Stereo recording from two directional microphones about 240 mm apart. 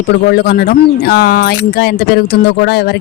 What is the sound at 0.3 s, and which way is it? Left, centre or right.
Speech, left.